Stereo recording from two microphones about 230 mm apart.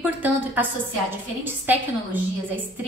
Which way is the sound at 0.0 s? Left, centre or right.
Centre.